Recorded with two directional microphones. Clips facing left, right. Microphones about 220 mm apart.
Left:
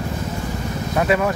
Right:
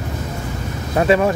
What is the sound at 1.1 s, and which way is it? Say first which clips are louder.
Speech: right 5 dB; 30° right (ahead or behind).